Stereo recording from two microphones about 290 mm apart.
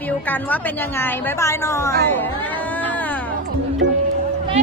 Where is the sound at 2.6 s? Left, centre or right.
Centre.